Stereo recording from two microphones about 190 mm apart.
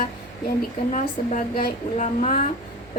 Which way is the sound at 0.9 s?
40° left (ahead or behind).